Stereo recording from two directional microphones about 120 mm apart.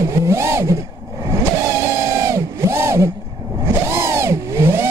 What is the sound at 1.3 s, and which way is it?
Vehicle, 25° right (ahead or behind).